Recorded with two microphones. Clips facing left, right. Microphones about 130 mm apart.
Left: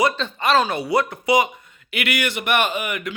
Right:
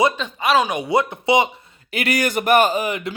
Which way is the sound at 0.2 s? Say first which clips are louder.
Even; 10° right (ahead or behind).